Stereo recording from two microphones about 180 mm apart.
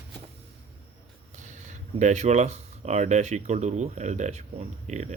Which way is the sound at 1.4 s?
40° right (ahead or behind).